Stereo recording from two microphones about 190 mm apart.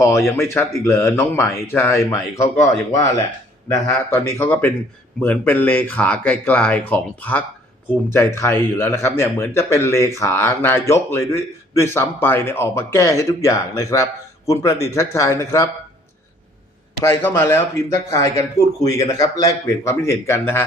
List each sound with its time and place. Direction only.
0.3 s speech: 15° left (ahead or behind)
17.0 s speech: 15° left (ahead or behind)